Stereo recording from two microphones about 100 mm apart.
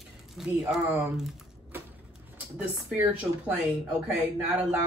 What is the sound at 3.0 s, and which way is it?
Speech, 15° right (ahead or behind).